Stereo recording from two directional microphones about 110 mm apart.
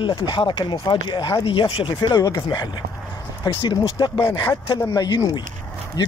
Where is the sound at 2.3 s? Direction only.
35° left (ahead or behind).